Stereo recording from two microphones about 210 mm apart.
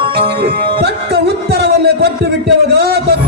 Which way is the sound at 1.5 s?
50° right (ahead or behind).